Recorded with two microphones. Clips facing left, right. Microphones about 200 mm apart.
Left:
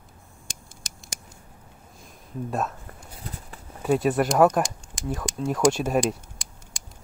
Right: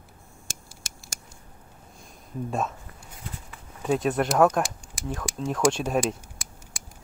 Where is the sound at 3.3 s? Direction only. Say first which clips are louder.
Left 1 dB; 40° left (ahead or behind).